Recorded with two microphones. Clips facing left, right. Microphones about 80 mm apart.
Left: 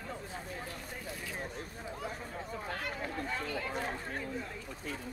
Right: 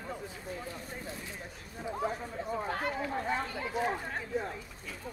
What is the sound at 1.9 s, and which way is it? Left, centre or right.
Chatter, right.